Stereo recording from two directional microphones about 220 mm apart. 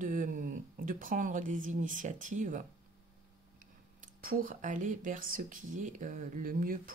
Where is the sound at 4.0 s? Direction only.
40° right (ahead or behind).